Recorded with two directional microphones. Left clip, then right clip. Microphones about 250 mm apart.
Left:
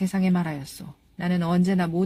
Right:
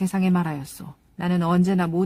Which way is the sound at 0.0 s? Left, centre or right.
Right.